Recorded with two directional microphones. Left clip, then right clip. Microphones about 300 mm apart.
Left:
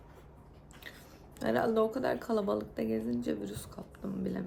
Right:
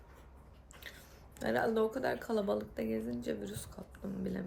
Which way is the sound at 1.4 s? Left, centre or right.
Centre.